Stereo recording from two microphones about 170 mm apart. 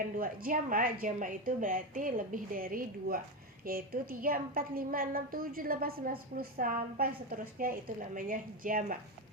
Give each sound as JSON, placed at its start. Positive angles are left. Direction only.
{"t": 0.2, "sound": "a woman's voice", "side_deg": -55}